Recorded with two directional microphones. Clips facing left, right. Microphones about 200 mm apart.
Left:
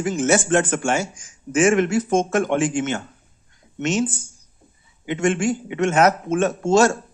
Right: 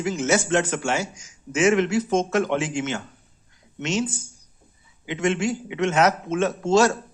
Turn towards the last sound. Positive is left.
turn(degrees=50)  # may be behind; listen again after turning